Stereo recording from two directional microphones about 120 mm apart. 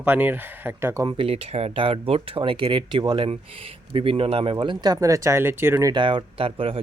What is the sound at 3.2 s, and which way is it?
Speech, 50° right (ahead or behind).